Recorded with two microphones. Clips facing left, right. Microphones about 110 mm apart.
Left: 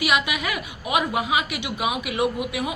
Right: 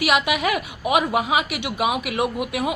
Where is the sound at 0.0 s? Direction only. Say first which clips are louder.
Right 3 dB; 50° right (ahead or behind).